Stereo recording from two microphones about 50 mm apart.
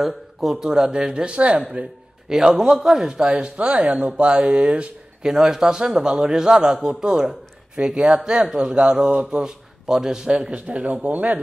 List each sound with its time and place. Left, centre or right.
0.0 s a man's voice: centre; by 1.6 s right
2.2 s speech: centre
5.2 s a man's voice: centre; by 11.3 s right